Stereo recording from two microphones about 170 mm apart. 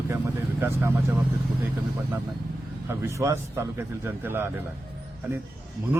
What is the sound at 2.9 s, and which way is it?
Speech, 15° right (ahead or behind).